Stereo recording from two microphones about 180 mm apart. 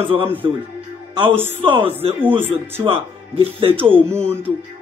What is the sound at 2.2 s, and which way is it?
Speech, 10° right (ahead or behind).